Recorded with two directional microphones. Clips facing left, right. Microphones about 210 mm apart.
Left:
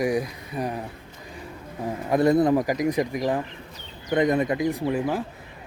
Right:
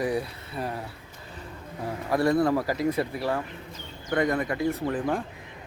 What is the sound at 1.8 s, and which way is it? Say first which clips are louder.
Speech: left 4 dB; 20° left (ahead or behind).